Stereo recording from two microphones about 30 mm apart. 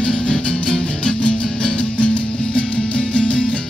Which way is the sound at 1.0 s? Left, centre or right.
Left.